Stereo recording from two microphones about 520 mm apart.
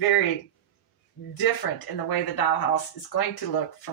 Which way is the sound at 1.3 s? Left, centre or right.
Left.